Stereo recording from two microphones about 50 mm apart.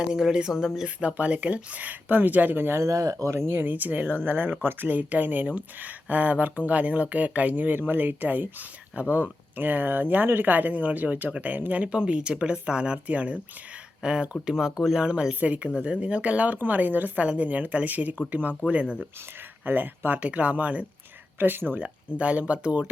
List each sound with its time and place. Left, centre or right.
0.0 s speech: centre
1.0 s speech: right
2.8 s speech: right
3.5 s speech: right; by 14.9 s centre
14.9 s speech: centre
19.6 s speech: right
20.2 s speech: right
21.3 s speech: right
22.2 s speech: right